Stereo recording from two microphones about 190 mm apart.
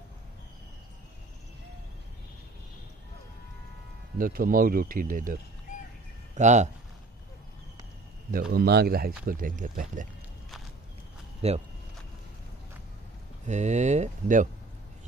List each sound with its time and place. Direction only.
4.2 s speech: 50° right (ahead or behind)
8.3 s speech: 50° right (ahead or behind)
11.4 s speech: 35° right (ahead or behind)
13.5 s speech: 40° right (ahead or behind)